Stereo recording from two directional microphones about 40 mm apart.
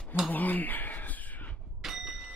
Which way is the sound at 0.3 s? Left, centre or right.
Left.